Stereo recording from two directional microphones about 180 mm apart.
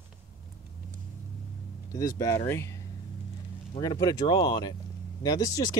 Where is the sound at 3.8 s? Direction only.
20° left (ahead or behind).